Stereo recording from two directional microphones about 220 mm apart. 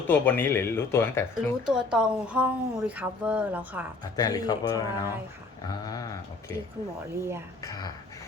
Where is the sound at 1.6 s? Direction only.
5° right (ahead or behind).